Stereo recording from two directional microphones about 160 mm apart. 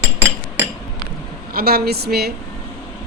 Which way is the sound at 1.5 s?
75° right (ahead or behind).